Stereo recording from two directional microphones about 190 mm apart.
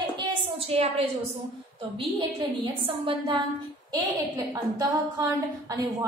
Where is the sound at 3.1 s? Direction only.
25° right (ahead or behind).